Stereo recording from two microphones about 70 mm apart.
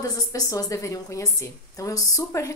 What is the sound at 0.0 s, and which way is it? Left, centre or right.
A woman's voice, left.